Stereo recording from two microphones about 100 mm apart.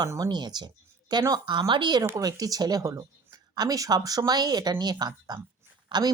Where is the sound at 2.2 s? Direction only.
40° right (ahead or behind).